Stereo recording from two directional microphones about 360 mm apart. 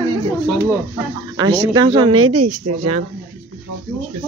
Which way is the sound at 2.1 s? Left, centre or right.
Right.